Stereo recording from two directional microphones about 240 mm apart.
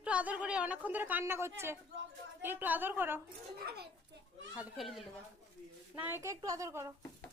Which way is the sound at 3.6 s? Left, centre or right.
Right.